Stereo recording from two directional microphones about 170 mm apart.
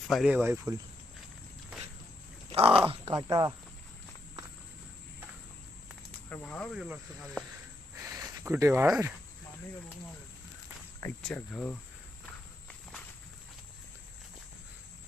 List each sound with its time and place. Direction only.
0.1 s speech: centre (ahead or behind)
0.3 s speech: 15° right (ahead or behind)
2.5 s speech: 35° right (ahead or behind)
3.2 s speech: 25° right (ahead or behind)
6.3 s speech: 10° left (ahead or behind)
6.7 s speech: 5° right (ahead or behind)
8.0 s speech: 20° right (ahead or behind)
11.2 s speech: 5° left (ahead or behind)